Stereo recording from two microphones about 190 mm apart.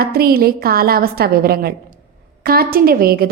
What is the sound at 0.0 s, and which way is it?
A woman's voice, 55° right (ahead or behind).